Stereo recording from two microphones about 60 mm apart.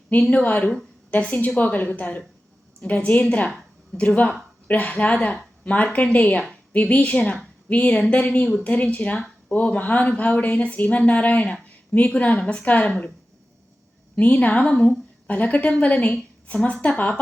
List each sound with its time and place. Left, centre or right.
0.1 s speech: left
14.2 s a woman's voice: left